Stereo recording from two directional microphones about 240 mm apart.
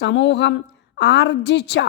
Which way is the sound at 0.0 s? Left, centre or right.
Left.